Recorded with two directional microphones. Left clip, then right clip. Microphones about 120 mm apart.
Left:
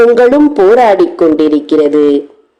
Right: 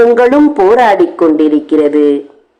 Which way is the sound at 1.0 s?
30° left (ahead or behind).